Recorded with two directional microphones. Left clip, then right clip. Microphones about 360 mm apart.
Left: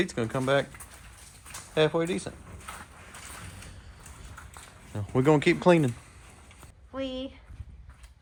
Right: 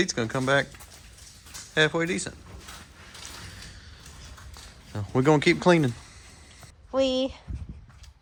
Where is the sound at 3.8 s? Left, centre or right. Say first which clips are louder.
Right 3 dB; centre.